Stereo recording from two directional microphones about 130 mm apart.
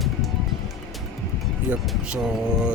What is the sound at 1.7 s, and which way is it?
Speech, 10° right (ahead or behind).